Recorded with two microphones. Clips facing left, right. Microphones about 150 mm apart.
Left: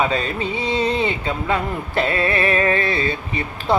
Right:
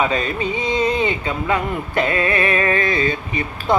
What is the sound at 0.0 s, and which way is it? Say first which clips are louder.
Speech: right 1 dB; 35° left (ahead or behind).